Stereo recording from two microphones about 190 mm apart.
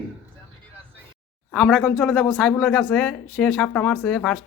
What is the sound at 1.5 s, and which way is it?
Speech, 5° left (ahead or behind).